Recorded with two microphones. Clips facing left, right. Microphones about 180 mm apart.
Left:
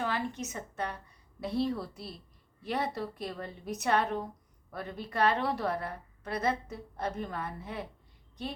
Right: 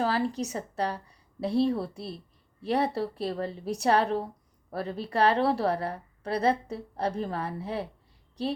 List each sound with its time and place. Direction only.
0.0 s a woman's voice: 35° right (ahead or behind)